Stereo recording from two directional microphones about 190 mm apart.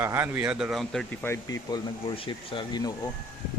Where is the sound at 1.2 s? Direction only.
15° left (ahead or behind).